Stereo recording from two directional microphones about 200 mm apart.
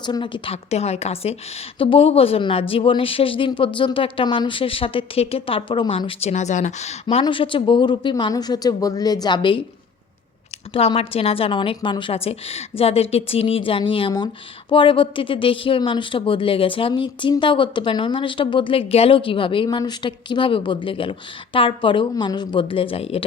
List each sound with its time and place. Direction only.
0.0 s a woman's voice: 25° left (ahead or behind)
10.8 s a woman's voice: 30° left (ahead or behind)